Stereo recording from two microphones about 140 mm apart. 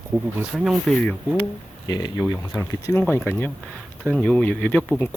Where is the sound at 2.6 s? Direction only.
15° left (ahead or behind).